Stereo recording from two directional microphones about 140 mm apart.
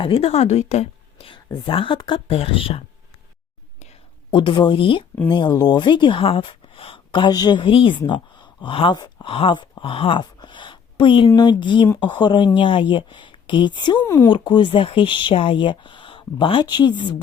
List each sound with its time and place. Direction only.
0.0 s a woman's voice: 45° left (ahead or behind)
4.3 s speech: 35° left (ahead or behind)
14.0 s speech: 15° left (ahead or behind)
14.3 s speech: 35° left (ahead or behind)